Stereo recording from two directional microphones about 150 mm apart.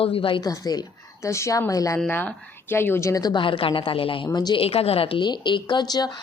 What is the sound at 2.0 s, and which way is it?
A woman's voice, 10° left (ahead or behind).